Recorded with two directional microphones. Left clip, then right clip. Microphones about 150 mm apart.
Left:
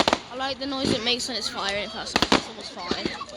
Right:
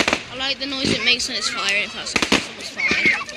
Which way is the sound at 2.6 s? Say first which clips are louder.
Right 7 dB; 45° left (ahead or behind).